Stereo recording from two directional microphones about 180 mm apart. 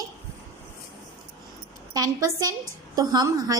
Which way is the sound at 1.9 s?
20° right (ahead or behind).